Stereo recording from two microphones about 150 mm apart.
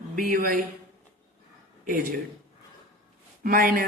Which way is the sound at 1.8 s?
70° right (ahead or behind).